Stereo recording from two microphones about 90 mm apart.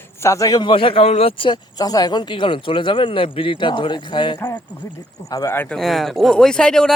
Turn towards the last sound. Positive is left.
turn(degrees=10)  # may be behind; listen again after turning